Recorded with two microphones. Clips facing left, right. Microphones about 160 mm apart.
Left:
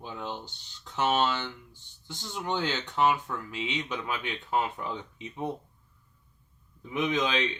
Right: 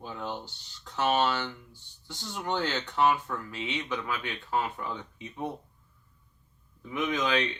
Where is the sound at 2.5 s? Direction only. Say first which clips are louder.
Even; 15° left (ahead or behind).